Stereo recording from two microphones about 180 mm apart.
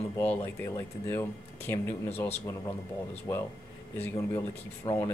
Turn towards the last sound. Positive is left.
turn(degrees=25)  # may be behind; listen again after turning